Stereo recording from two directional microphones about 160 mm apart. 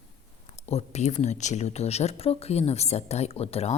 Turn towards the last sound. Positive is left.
turn(degrees=40)  # may be behind; listen again after turning